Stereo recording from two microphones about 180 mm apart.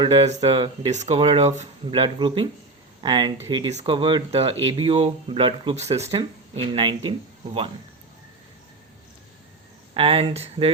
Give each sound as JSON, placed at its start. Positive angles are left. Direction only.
{"t": 0.0, "sound": "speech", "side_deg": -30}
{"t": 9.9, "sound": "speech", "side_deg": -35}